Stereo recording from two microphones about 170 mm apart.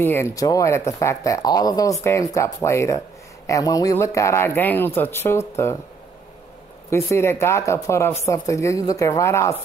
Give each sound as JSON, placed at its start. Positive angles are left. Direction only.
{"t": 0.0, "sound": "speech", "side_deg": 15}
{"t": 6.9, "sound": "speech", "side_deg": 15}